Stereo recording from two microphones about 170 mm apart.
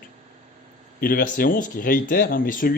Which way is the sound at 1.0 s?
55° left (ahead or behind).